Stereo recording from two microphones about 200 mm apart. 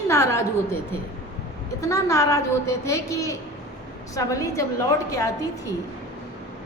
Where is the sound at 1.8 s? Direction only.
15° left (ahead or behind).